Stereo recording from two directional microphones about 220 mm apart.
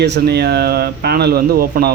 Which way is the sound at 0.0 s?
50° right (ahead or behind).